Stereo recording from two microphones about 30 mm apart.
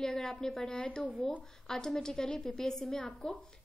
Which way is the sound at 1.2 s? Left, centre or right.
Centre.